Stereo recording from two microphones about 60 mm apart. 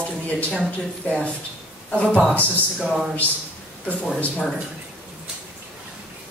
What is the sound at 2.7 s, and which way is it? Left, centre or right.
Speech, centre.